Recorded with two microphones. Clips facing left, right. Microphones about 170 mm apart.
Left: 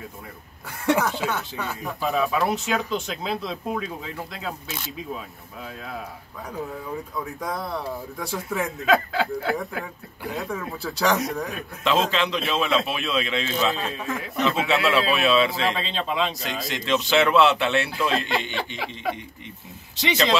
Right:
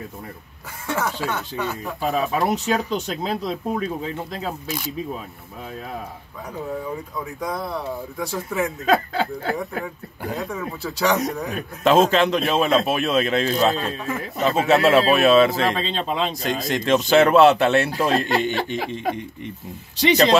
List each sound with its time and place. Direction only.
1.3 s speech: centre (ahead or behind)
2.0 s speech: 40° right (ahead or behind)
7.2 s speech: centre (ahead or behind)
8.8 s speech: 40° right (ahead or behind)
10.4 s speech: centre (ahead or behind)
11.8 s speech: 45° right (ahead or behind)
13.7 s speech: centre (ahead or behind)
14.4 s speech: 40° right (ahead or behind)